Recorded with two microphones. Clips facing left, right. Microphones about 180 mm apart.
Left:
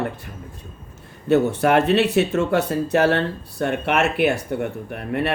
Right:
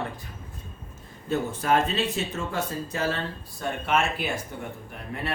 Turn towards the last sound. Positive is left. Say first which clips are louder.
# left 10 dB
turn(degrees=65)  # may be behind; listen again after turning